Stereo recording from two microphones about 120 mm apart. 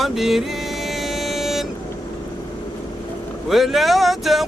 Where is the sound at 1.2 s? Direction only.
Centre (ahead or behind).